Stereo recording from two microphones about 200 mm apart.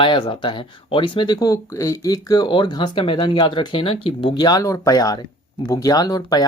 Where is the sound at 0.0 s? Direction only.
25° left (ahead or behind).